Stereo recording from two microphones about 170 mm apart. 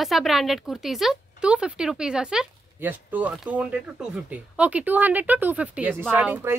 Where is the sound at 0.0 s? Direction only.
Centre (ahead or behind).